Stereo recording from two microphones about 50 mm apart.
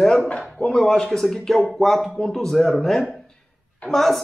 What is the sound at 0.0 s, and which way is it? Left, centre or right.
Speech, centre.